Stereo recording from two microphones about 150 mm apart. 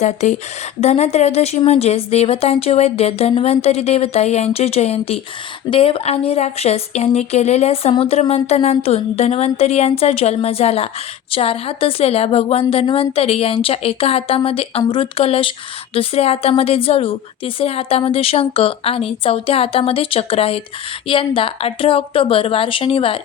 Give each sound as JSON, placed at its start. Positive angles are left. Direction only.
{"t": 0.0, "sound": "a woman's voice", "side_deg": 50}